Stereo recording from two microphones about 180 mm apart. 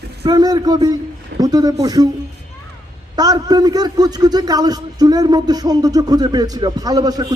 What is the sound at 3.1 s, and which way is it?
A man's voice, 20° right (ahead or behind).